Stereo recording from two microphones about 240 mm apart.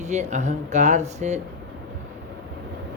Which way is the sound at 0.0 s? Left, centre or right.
Right.